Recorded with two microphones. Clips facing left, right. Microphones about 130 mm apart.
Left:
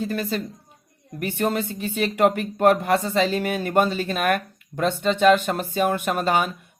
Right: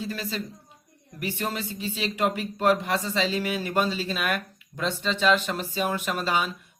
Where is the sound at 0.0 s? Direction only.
50° left (ahead or behind).